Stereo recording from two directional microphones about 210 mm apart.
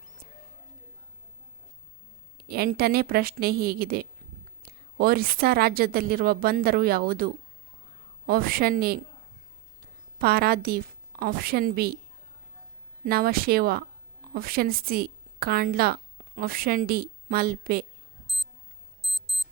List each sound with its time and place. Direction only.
2.4 s a woman's voice: 45° right (ahead or behind)
8.3 s a woman's voice: 45° right (ahead or behind)
10.2 s a woman's voice: 45° right (ahead or behind)
13.1 s a woman's voice: 45° right (ahead or behind)
19.0 s alarm clock: centre (ahead or behind)